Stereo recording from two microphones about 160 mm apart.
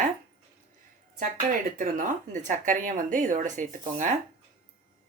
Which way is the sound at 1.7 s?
55° right (ahead or behind).